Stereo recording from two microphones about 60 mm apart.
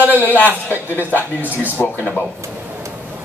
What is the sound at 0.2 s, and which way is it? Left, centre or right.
Speech, left.